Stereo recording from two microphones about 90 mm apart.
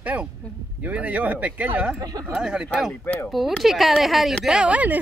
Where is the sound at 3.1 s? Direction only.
25° left (ahead or behind).